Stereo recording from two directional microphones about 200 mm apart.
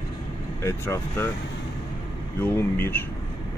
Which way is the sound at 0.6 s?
15° left (ahead or behind).